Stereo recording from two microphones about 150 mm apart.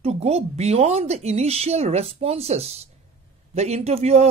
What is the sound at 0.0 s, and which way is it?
Speech, 45° right (ahead or behind).